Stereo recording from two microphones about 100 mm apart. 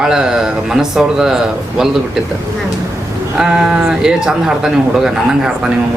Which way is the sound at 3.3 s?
5° right (ahead or behind).